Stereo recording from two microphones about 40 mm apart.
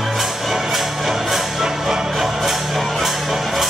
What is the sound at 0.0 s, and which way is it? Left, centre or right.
Music, centre.